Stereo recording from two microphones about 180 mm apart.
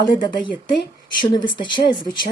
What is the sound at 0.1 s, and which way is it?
Speech, 25° left (ahead or behind).